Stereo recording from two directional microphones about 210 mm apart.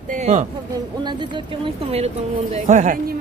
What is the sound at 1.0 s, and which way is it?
Speech, 20° right (ahead or behind).